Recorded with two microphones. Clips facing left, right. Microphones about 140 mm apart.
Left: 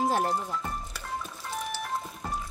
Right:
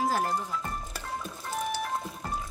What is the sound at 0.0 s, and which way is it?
Music, 25° left (ahead or behind).